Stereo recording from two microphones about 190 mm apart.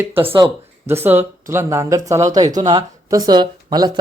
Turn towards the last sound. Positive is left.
turn(degrees=-20)  # may be behind; listen again after turning